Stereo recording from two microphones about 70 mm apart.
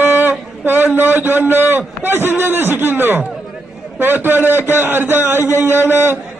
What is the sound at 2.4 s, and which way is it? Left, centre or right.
A man's voice, right.